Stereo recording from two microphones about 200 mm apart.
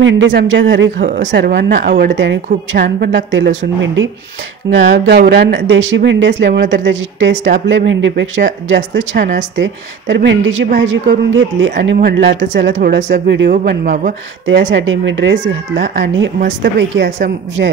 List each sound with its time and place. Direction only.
0.0 s a woman's voice: 65° right (ahead or behind)
1.0 s speech: 45° right (ahead or behind)
1.3 s a woman's voice: 55° right (ahead or behind)
9.2 s speech: 40° right (ahead or behind)
9.6 s a woman's voice: 60° right (ahead or behind)
14.4 s a woman's voice: 65° right (ahead or behind)